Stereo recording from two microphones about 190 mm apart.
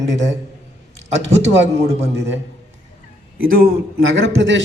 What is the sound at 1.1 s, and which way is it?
Speech, 35° right (ahead or behind).